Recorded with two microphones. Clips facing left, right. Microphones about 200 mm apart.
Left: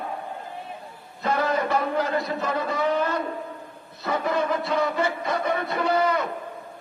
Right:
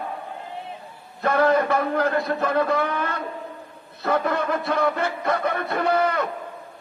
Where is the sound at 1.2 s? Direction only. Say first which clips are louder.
Right 5 dB; 60° right (ahead or behind).